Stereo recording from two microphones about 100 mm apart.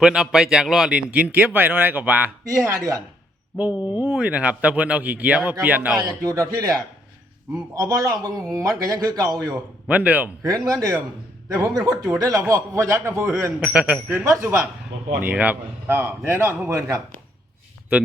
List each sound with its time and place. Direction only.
0.0 s speech: 5° right (ahead or behind)
2.5 s speech: 30° right (ahead or behind)
3.6 s speech: 15° right (ahead or behind)
6.0 s speech: 35° right (ahead or behind)
7.8 s speech: 35° right (ahead or behind)
9.8 s a man's voice: 15° right (ahead or behind)
10.4 s speech: 35° right (ahead or behind)
13.6 s speech: 10° right (ahead or behind)
14.3 s speech: 20° right (ahead or behind)